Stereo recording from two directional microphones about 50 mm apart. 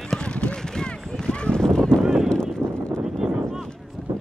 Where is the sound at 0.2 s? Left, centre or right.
Left.